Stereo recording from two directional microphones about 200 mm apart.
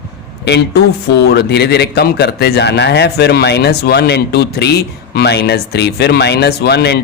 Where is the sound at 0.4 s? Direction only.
55° left (ahead or behind).